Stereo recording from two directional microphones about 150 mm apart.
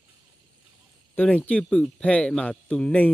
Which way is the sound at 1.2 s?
10° left (ahead or behind).